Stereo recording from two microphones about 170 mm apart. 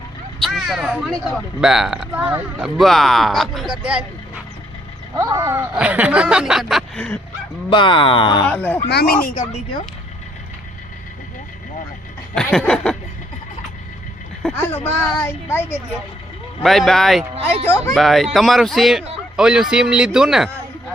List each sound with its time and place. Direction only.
0.4 s speech: centre (ahead or behind)
5.1 s speech: 20° right (ahead or behind); by 7.2 s 5° left (ahead or behind)
7.7 s speech: 30° left (ahead or behind)
8.4 s a woman's voice: 10° left (ahead or behind)
8.9 s speech: 65° left (ahead or behind); by 9.6 s 50° left (ahead or behind)
12.3 s speech: 5° left (ahead or behind)
14.4 s a woman's voice: 10° left (ahead or behind)
16.6 s speech: centre (ahead or behind)